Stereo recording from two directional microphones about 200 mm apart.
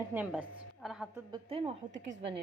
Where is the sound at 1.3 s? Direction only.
30° right (ahead or behind).